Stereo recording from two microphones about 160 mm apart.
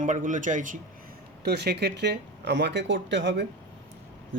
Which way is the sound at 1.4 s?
90° right.